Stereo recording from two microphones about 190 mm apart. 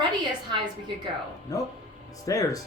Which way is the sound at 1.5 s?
20° left (ahead or behind).